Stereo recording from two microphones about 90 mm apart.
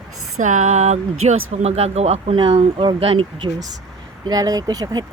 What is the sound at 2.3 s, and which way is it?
Speech, 80° right.